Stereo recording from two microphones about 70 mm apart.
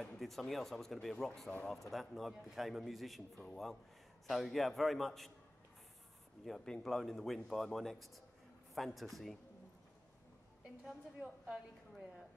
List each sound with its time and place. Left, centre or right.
0.2 s speech: centre
6.4 s speech: centre
11.4 s a sound: centre